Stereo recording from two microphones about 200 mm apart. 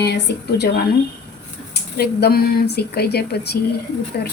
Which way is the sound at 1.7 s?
55° left (ahead or behind).